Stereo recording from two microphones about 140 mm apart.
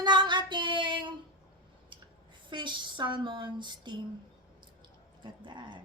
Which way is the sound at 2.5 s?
35° right (ahead or behind).